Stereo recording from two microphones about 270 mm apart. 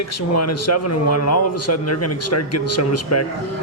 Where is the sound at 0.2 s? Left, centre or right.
Left.